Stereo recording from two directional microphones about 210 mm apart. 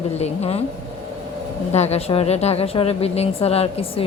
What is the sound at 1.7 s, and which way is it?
Speech, 30° left (ahead or behind).